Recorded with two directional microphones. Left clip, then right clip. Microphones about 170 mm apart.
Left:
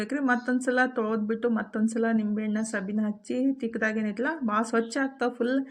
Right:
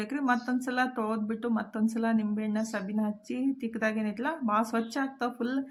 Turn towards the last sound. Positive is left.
turn(degrees=20)  # may be behind; listen again after turning